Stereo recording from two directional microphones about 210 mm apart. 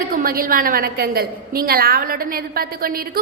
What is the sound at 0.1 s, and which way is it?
A woman's voice, 45° right (ahead or behind).